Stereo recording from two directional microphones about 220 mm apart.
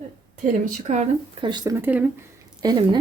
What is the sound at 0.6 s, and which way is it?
Speech, 35° right (ahead or behind).